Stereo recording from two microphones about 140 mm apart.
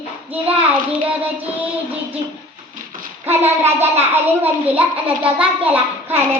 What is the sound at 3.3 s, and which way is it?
Child singing, 15° right (ahead or behind).